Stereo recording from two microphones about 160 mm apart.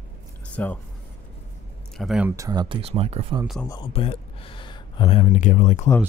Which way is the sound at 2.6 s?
35° right (ahead or behind).